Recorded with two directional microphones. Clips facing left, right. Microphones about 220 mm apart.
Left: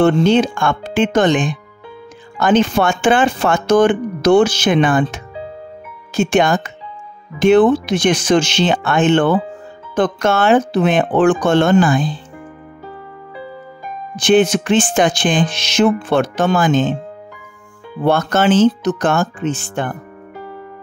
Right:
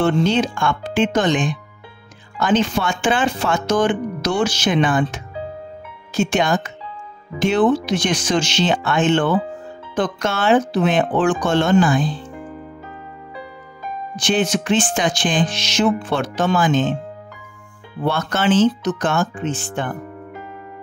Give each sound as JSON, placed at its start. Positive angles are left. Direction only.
{"t": 0.0, "sound": "music", "side_deg": 55}
{"t": 2.4, "sound": "music", "side_deg": 55}
{"t": 6.1, "sound": "speech", "side_deg": 55}
{"t": 7.3, "sound": "music", "side_deg": 55}
{"t": 14.2, "sound": "music", "side_deg": 55}
{"t": 18.0, "sound": "speech", "side_deg": 45}